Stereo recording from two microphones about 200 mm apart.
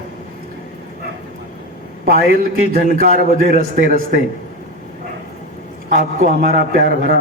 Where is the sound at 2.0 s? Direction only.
50° right (ahead or behind).